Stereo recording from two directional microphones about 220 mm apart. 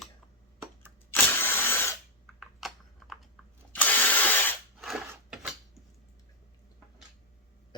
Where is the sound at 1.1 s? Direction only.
10° left (ahead or behind).